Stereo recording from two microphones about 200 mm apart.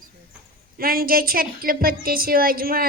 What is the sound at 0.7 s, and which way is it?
A child's voice, 45° right (ahead or behind).